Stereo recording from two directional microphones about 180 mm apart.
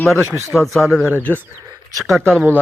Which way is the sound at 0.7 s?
Centre (ahead or behind).